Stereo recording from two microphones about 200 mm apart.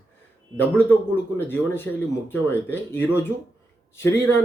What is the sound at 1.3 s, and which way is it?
Speech, 10° left (ahead or behind).